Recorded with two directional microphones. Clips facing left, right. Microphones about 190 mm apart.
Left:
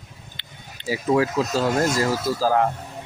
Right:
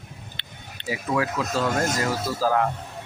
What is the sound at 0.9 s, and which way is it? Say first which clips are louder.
Speech: left 5 dB; 30° left (ahead or behind).